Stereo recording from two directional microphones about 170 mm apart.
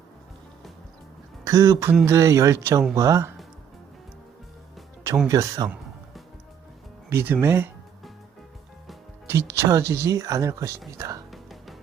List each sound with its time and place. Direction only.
1.5 s speech: 20° right (ahead or behind)
5.3 s speech: 20° right (ahead or behind)
7.1 s speech: 15° right (ahead or behind)
9.2 s speech: 15° right (ahead or behind)
11.3 s music: centre (ahead or behind)